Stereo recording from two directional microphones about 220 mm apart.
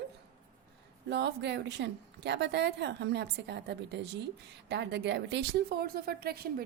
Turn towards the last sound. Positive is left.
turn(degrees=-45)  # may be behind; listen again after turning